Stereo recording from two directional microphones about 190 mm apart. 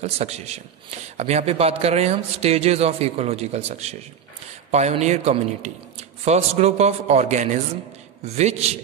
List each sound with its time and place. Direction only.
0.0 s a man's voice: 35° right (ahead or behind)